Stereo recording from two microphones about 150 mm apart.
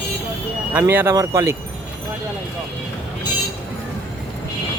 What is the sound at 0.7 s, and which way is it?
Speech, 15° right (ahead or behind).